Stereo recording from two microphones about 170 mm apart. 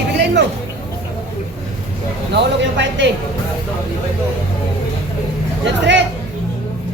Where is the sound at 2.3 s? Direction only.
90° right.